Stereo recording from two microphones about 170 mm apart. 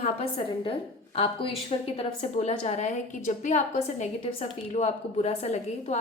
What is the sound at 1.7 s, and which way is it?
A woman's voice, 35° left (ahead or behind).